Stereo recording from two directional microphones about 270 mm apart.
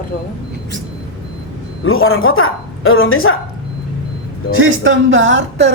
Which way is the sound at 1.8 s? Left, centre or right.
Left.